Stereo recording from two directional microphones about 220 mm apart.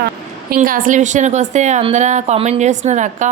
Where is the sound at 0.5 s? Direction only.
40° right (ahead or behind).